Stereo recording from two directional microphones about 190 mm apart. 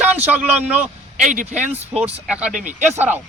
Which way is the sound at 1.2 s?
40° right (ahead or behind).